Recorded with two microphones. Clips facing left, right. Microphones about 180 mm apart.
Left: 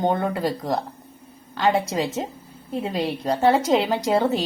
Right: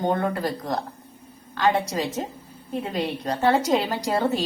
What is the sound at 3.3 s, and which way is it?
Speech, 25° left (ahead or behind).